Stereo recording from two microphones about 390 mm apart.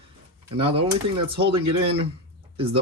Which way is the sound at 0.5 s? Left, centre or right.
Centre.